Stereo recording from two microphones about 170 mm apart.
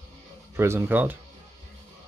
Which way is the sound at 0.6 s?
15° right (ahead or behind).